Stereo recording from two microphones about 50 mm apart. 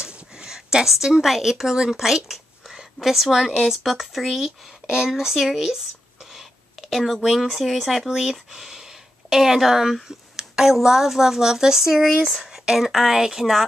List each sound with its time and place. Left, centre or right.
0.0 s speech: centre
4.8 s speech: centre
6.3 s a sound: centre
7.2 s speech: centre